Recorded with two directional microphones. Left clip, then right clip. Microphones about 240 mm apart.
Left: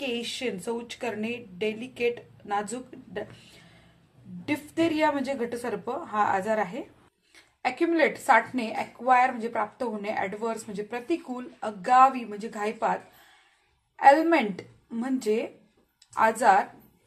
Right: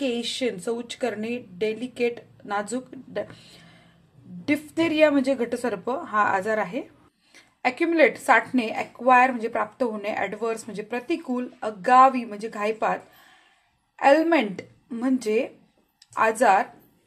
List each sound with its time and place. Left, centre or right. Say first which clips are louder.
0.0 s a woman's voice: right 4 dB; right